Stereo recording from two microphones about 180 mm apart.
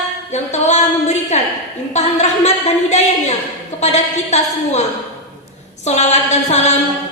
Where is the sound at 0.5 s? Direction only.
40° left (ahead or behind).